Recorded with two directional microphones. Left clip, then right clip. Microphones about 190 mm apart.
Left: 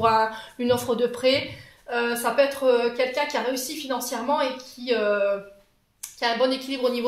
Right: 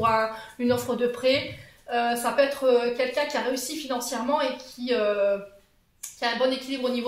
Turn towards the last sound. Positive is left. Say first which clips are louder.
# left 2 dB
turn(degrees=45)  # may be behind; listen again after turning